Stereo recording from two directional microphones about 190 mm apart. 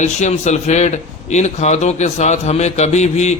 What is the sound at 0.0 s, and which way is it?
A man's voice, 40° left (ahead or behind).